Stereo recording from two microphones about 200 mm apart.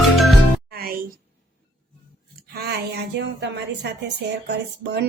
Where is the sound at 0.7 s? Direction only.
50° right (ahead or behind).